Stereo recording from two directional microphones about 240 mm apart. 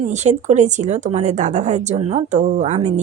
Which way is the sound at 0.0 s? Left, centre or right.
Right.